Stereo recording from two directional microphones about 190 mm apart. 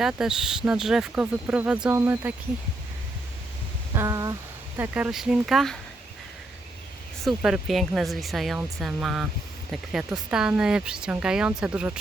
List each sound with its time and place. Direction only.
0.0 s speech: 5° right (ahead or behind)
3.9 s a sound: 20° right (ahead or behind)
4.8 s speech: 10° right (ahead or behind)
7.3 s speech: centre (ahead or behind)